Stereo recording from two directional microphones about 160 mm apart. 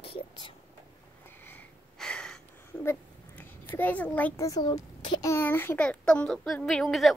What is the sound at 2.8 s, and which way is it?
A child's voice, 15° left (ahead or behind).